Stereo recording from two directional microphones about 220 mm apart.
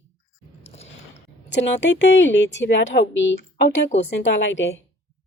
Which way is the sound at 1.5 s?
55° left (ahead or behind).